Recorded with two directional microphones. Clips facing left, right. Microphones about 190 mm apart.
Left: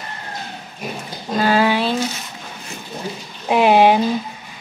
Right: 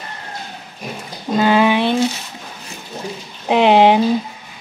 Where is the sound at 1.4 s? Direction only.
20° right (ahead or behind).